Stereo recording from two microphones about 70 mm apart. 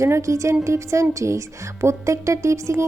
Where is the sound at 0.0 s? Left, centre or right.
Right.